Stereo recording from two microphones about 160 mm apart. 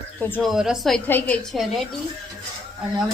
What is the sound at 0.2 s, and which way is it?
Speech, 10° left (ahead or behind).